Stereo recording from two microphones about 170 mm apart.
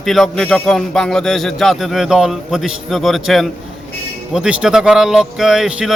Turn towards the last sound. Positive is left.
turn(degrees=-5)  # may be behind; listen again after turning